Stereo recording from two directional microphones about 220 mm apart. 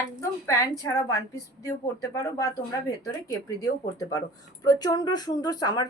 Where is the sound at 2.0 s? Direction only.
15° left (ahead or behind).